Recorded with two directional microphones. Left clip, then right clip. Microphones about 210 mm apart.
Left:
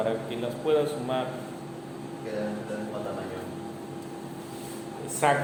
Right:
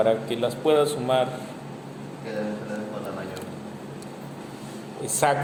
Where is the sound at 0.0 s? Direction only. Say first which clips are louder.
Right 7 dB; 50° right (ahead or behind).